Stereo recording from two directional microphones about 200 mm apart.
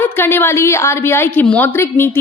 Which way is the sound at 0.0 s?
10° left (ahead or behind).